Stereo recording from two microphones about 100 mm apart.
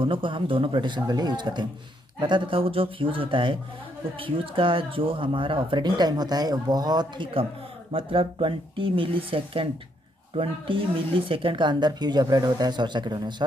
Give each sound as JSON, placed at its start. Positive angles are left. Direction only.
{"t": 0.0, "sound": "speech", "side_deg": -60}
{"t": 7.9, "sound": "speech", "side_deg": -65}